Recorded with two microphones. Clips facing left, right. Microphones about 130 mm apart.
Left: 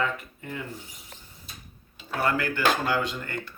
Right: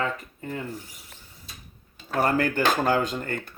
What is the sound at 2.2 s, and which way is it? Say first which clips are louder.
Speech: right 4 dB; 40° right (ahead or behind).